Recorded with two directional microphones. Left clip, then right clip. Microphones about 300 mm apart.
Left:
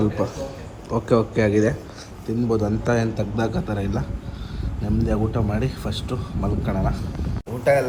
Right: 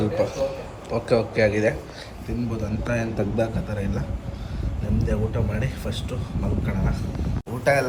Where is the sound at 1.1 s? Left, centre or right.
Centre.